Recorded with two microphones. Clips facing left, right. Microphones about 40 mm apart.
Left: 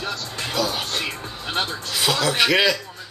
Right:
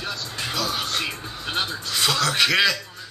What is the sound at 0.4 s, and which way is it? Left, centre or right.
Music, centre.